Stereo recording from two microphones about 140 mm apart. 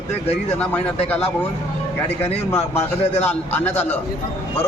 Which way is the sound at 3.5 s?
15° left (ahead or behind).